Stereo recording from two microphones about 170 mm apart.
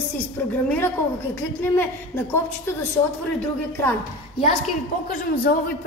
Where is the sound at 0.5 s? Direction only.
10° left (ahead or behind).